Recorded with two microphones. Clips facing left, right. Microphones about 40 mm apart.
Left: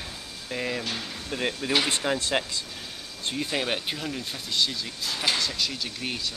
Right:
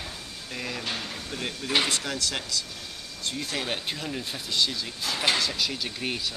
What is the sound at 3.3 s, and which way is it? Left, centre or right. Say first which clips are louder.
Speech: left 4 dB; centre.